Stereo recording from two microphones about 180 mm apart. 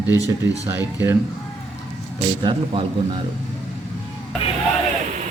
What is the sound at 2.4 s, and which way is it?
Speech, 25° right (ahead or behind).